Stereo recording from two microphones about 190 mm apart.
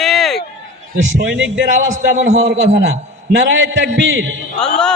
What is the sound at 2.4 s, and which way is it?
Speech, 60° right (ahead or behind).